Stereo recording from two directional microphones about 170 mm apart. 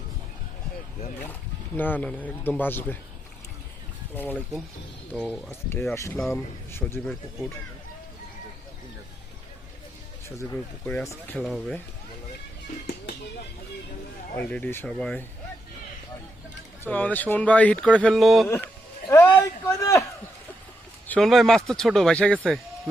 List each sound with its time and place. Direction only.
1.3 s speech: 10° left (ahead or behind)
4.1 s speech: 10° left (ahead or behind)
10.8 s speech: 15° left (ahead or behind)
14.3 s speech: 10° left (ahead or behind)
16.8 s speech: 10° left (ahead or behind)
19.0 s a sound: 15° left (ahead or behind)
21.1 s speech: centre (ahead or behind)